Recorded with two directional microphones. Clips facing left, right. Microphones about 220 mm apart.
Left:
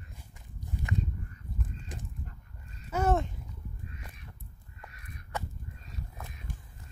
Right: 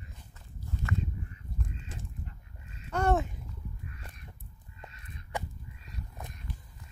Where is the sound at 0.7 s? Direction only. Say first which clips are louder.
Right 1 dB; 15° left (ahead or behind).